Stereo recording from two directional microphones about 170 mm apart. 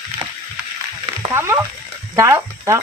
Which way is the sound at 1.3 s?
15° right (ahead or behind).